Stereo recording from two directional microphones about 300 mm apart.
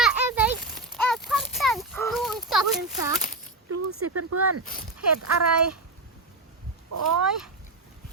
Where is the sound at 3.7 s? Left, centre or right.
Right.